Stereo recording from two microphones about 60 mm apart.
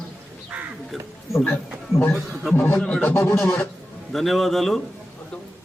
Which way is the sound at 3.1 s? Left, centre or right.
Left.